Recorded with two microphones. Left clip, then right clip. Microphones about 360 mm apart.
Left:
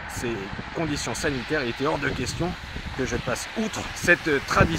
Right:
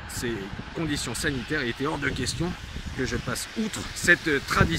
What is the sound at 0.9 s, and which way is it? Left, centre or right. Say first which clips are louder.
Speech: even; centre.